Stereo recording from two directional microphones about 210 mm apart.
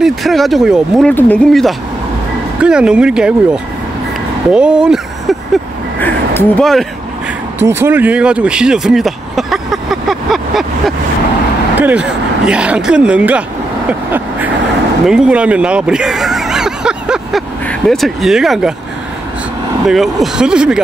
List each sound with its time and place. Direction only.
0.0 s speech: centre (ahead or behind)
4.5 s speech: 5° right (ahead or behind)
5.9 s a sound: 10° left (ahead or behind)
7.5 s vehicle: 10° right (ahead or behind)
11.8 s speech: 5° right (ahead or behind)
13.8 s vehicle: 10° right (ahead or behind)
15.0 s a sound: 5° right (ahead or behind)
19.9 s speech: centre (ahead or behind)